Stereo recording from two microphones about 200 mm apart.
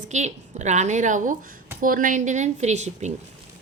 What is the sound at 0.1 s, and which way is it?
A woman's voice, 35° right (ahead or behind).